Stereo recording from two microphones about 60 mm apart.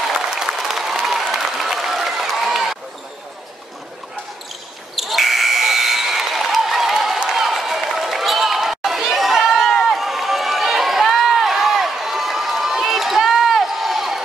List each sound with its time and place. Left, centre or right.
0.3 s applause: centre
4.9 s buzzer: centre
7.3 s a sound: centre